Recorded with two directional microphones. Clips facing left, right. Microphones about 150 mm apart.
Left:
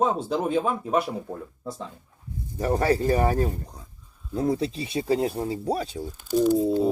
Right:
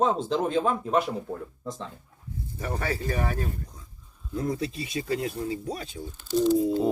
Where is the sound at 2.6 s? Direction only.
40° left (ahead or behind).